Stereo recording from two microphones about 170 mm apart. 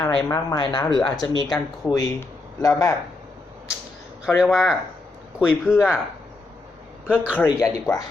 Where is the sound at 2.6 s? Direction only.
20° left (ahead or behind).